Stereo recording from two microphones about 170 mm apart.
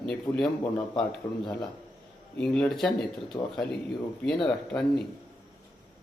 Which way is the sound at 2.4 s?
5° left (ahead or behind).